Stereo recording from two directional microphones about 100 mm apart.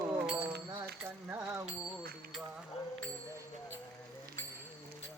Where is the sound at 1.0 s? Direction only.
20° right (ahead or behind).